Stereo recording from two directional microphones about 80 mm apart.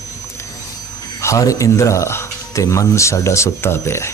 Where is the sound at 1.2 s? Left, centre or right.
Left.